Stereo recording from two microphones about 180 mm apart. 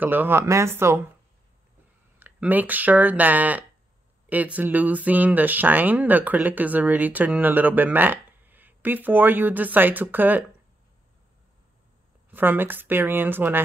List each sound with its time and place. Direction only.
0.0 s speech: 10° right (ahead or behind)
2.1 s speech: 10° right (ahead or behind)
12.3 s speech: 10° right (ahead or behind)